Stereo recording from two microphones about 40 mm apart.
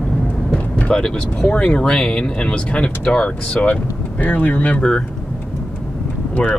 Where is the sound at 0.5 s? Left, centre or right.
Left.